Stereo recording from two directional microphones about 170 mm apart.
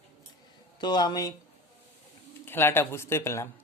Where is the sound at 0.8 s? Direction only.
25° left (ahead or behind).